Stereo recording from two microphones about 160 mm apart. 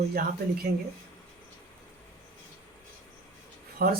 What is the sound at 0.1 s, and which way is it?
Speech, 75° right (ahead or behind).